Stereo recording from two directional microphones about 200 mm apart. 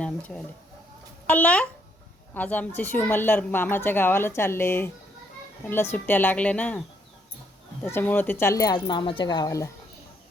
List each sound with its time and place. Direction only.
0.0 s a sound: 5° left (ahead or behind)
1.3 s speech: 5° left (ahead or behind)
7.9 s speech: 10° left (ahead or behind)